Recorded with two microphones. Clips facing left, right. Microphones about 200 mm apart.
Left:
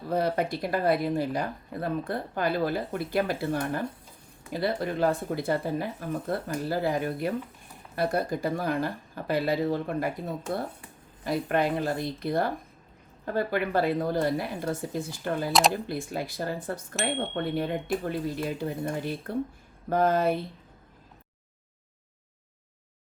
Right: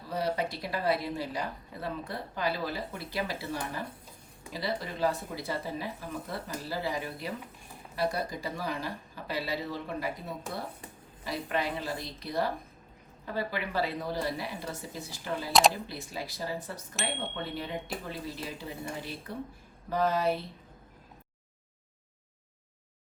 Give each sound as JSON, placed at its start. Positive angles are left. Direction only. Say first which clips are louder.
{"t": 0.1, "sound": "speech", "louder": "left 5 dB", "side_deg": 55}
{"t": 11.2, "sound": "speech", "louder": "left 7 dB", "side_deg": 55}
{"t": 16.9, "sound": "speech", "louder": "left 5 dB", "side_deg": 0}
{"t": 17.6, "sound": "speech", "louder": "left 8 dB", "side_deg": 55}